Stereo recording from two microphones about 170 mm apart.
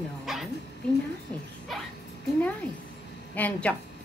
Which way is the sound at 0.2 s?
Centre (ahead or behind).